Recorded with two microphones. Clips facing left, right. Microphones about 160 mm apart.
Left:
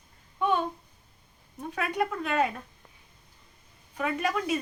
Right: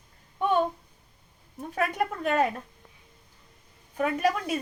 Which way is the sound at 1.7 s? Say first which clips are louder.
Right 1 dB; 45° right (ahead or behind).